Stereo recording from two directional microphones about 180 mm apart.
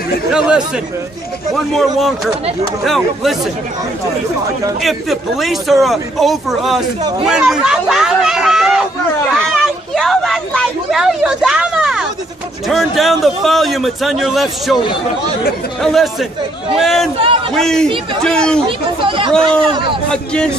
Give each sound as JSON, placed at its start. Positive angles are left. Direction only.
{"t": 0.3, "sound": "a man's voice", "side_deg": -5}
{"t": 1.8, "sound": "a man's voice", "side_deg": 0}
{"t": 4.8, "sound": "a man's voice", "side_deg": 0}
{"t": 7.2, "sound": "a sound", "side_deg": -5}
{"t": 12.6, "sound": "a man's voice", "side_deg": 0}
{"t": 15.8, "sound": "a man's voice", "side_deg": 0}
{"t": 18.7, "sound": "speech", "side_deg": -30}
{"t": 20.1, "sound": "a man's voice", "side_deg": 5}